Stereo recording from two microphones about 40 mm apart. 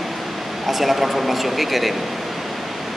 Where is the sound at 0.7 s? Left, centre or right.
Centre.